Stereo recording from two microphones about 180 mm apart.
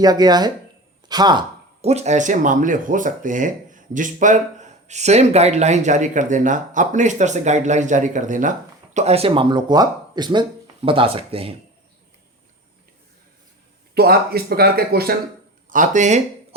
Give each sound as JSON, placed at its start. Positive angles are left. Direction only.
{"t": 0.0, "sound": "speech", "side_deg": -20}
{"t": 1.8, "sound": "speech", "side_deg": -35}
{"t": 13.9, "sound": "speech", "side_deg": -60}
{"t": 15.7, "sound": "speech", "side_deg": -45}